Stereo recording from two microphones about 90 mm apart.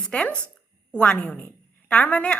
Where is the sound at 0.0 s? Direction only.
10° left (ahead or behind).